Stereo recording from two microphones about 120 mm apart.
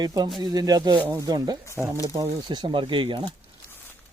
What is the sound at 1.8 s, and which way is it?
Speech, 10° right (ahead or behind).